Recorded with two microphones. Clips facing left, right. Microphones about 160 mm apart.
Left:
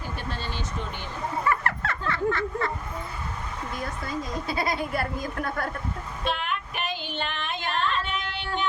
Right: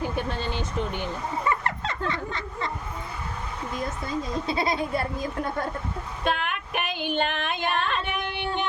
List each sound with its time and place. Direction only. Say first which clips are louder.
1.5 s a sound: left 1 dB; 20° right (ahead or behind)
3.8 s speech: right 2 dB; 25° right (ahead or behind)
6.2 s female singing: right 2 dB; 55° right (ahead or behind)